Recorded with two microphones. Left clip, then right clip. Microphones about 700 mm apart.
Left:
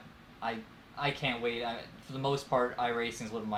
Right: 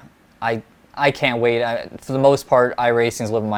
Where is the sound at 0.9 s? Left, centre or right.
Right.